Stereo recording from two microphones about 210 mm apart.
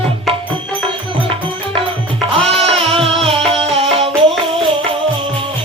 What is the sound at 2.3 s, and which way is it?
Music, 25° right (ahead or behind).